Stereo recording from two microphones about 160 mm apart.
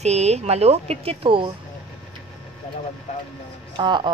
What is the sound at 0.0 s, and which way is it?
A woman's voice, 45° right (ahead or behind).